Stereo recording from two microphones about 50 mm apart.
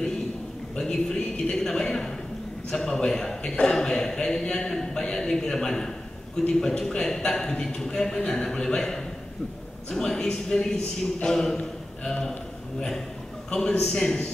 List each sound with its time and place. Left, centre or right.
0.7 s a man's voice: centre
13.5 s speech: centre